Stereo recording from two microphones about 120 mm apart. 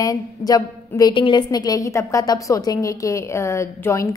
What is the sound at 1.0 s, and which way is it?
A woman's voice, 40° left (ahead or behind).